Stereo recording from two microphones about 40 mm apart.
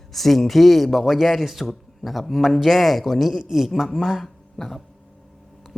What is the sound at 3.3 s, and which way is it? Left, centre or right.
Speech, centre.